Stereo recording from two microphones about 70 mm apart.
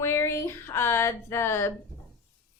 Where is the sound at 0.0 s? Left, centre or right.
Left.